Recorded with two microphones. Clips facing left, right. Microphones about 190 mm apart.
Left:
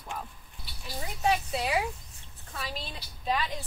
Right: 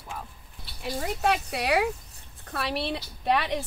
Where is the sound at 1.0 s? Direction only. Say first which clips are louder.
Right 1 dB; 70° right (ahead or behind).